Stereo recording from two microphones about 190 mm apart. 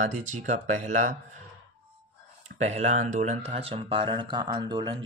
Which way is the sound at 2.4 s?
35° right (ahead or behind).